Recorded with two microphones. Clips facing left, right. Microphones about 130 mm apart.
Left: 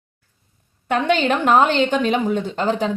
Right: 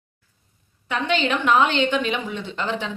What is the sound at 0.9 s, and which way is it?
A woman's voice, 50° left (ahead or behind).